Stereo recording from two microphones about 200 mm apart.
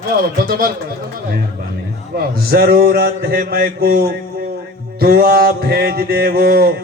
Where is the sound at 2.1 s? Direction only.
50° right (ahead or behind).